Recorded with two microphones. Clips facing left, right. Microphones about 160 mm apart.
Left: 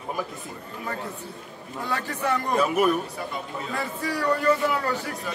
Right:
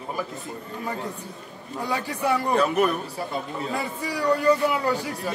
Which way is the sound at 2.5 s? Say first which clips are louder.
Even; 5° left (ahead or behind).